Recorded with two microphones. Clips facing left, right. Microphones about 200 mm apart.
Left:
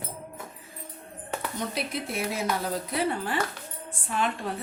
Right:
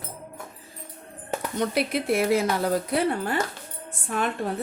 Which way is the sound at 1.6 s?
70° right (ahead or behind).